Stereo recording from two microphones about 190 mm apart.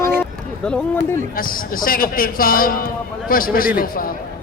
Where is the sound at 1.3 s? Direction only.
50° left (ahead or behind).